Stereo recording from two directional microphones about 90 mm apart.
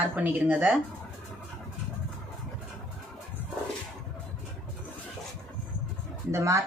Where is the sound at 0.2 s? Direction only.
15° right (ahead or behind).